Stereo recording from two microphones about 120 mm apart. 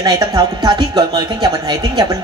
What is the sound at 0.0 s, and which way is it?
A woman's voice, 35° right (ahead or behind).